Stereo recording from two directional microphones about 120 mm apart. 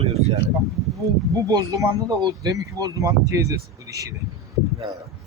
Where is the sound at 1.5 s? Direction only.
30° right (ahead or behind).